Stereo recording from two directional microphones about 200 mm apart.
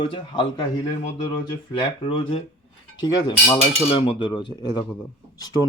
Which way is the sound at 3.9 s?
25° left (ahead or behind).